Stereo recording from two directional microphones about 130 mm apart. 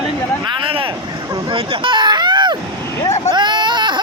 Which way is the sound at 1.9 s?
35° right (ahead or behind).